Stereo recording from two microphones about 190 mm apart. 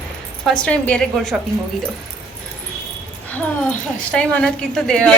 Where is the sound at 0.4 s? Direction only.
5° left (ahead or behind).